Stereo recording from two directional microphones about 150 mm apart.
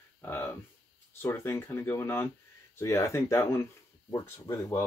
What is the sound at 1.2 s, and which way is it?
Speech, 15° left (ahead or behind).